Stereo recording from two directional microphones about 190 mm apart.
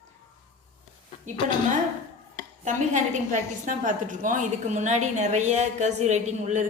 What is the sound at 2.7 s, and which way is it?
A woman's voice, 40° right (ahead or behind).